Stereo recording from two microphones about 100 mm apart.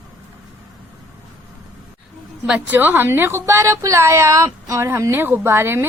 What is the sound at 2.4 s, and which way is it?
A woman's voice, 15° right (ahead or behind).